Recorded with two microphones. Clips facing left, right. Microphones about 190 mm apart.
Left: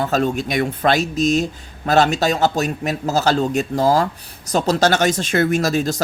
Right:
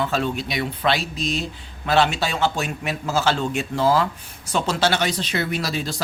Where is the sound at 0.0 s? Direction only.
45° left (ahead or behind).